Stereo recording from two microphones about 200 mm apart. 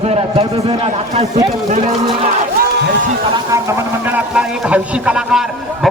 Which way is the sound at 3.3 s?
15° right (ahead or behind).